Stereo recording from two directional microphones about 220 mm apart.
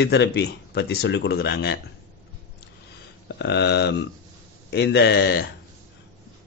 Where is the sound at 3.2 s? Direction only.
50° left (ahead or behind).